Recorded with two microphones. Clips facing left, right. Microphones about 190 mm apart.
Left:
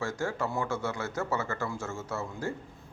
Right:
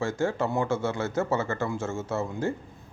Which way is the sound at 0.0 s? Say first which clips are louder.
Right 5 dB; 25° right (ahead or behind).